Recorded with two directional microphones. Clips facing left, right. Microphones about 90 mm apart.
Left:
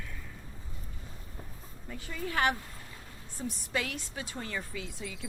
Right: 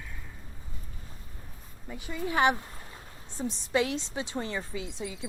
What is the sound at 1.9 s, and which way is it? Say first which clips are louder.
A woman's voice: right 4 dB; 20° right (ahead or behind).